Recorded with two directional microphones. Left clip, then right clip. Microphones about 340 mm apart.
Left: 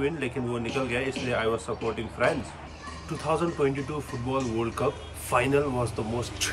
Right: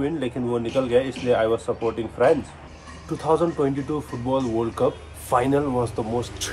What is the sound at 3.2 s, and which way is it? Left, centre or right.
Speech, centre.